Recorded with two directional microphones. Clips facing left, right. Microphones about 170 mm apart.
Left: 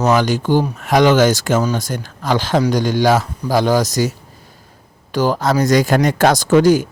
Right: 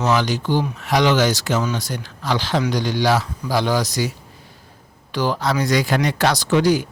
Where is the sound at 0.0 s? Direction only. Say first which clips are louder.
Left 4 dB; 50° left (ahead or behind).